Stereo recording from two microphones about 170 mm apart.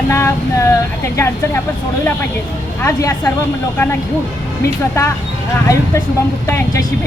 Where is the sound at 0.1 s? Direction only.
15° left (ahead or behind).